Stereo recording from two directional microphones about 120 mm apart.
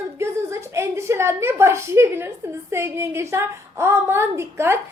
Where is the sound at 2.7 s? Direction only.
20° right (ahead or behind).